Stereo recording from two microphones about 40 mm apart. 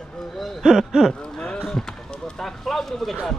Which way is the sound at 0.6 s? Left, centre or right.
Centre.